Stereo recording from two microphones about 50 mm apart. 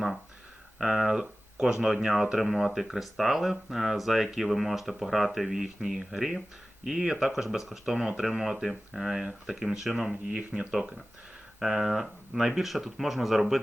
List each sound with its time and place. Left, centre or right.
0.8 s speech: centre
10.3 s speech: right; by 13.6 s centre